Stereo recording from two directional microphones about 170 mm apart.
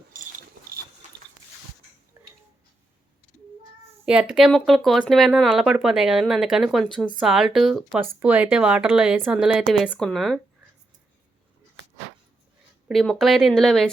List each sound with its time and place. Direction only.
1.0 s a sound: 45° right (ahead or behind)
4.0 s speech: 5° right (ahead or behind)
12.9 s speech: centre (ahead or behind)